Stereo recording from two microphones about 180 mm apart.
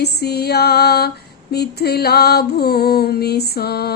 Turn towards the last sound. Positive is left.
turn(degrees=60)  # may be behind; listen again after turning